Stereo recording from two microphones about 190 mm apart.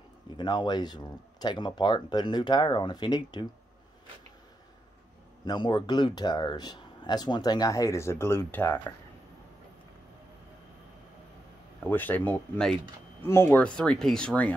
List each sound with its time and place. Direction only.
0.4 s speech: 25° left (ahead or behind)
5.4 s speech: 25° left (ahead or behind)
11.8 s speech: 10° left (ahead or behind)